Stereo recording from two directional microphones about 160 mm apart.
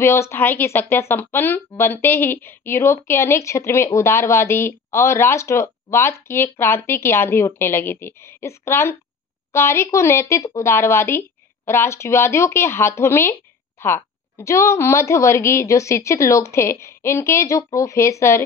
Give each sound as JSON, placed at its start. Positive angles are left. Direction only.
{"t": 0.0, "sound": "speech", "side_deg": 15}